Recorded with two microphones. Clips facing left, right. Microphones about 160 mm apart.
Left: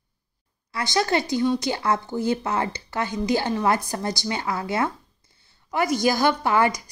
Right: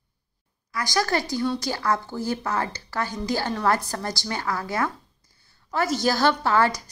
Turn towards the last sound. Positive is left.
turn(degrees=15)  # may be behind; listen again after turning